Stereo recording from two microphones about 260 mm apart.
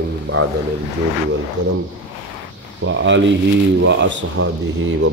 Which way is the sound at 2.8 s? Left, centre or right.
Right.